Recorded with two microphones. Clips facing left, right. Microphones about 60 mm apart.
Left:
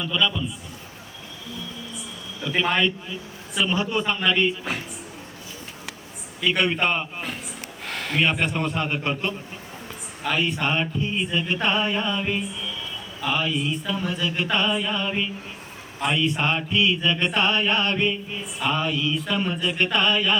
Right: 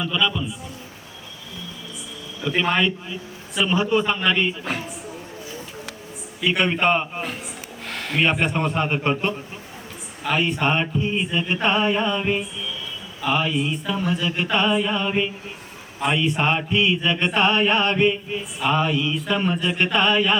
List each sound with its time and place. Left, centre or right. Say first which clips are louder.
0.0 s mantra: right 1 dB; centre
2.4 s a man's voice: right 1 dB; centre
3.8 s mantra: right 3 dB; centre
6.4 s mantra: right 2 dB; centre
7.9 s a sound: right 2 dB; centre
8.4 s mantra: right 3 dB; centre